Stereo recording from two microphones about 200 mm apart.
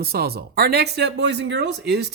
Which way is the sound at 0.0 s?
50° right (ahead or behind).